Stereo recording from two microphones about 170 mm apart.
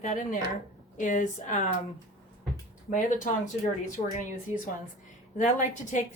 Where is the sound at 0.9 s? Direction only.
50° left (ahead or behind).